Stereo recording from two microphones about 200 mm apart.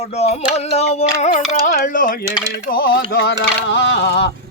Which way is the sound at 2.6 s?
50° left (ahead or behind).